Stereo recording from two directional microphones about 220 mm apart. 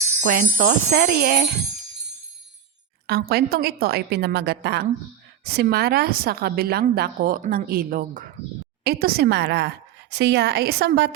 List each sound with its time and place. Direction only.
0.2 s jingle bell: 40° right (ahead or behind)
3.1 s a woman's voice: 45° right (ahead or behind)